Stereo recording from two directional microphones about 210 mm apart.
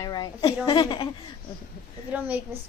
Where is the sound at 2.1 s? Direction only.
10° right (ahead or behind).